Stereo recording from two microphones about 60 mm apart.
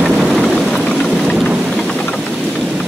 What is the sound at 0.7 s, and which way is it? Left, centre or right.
Rain, centre.